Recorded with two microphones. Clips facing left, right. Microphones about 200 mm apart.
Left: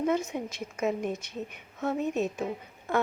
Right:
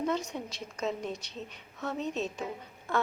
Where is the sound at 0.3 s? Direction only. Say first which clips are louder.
Left 4 dB; 15° left (ahead or behind).